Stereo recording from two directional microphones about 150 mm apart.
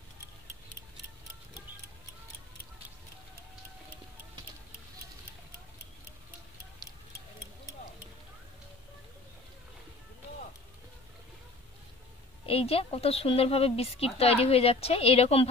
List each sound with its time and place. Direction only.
12.4 s speech: 40° left (ahead or behind)